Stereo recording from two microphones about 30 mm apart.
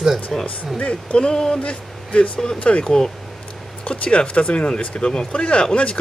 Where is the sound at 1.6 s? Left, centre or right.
Left.